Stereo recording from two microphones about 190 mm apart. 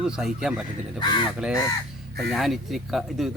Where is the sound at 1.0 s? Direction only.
25° left (ahead or behind).